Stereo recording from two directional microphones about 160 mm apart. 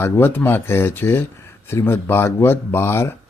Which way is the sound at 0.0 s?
15° left (ahead or behind).